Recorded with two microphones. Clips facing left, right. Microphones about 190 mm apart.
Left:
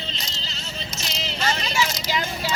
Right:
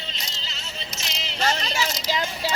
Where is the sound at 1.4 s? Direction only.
40° right (ahead or behind).